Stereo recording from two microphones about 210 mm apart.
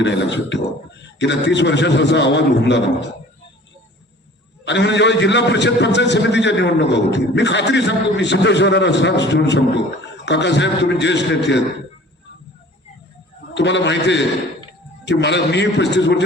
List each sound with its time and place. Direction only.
0.0 s a man's voice: 55° left (ahead or behind)
4.6 s a man's voice: 55° left (ahead or behind)
13.5 s a man's voice: 55° left (ahead or behind)